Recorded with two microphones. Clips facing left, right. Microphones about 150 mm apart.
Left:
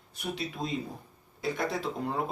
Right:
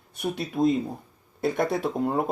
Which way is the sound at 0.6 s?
50° right (ahead or behind).